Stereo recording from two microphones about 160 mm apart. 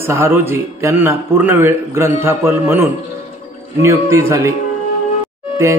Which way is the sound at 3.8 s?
15° right (ahead or behind).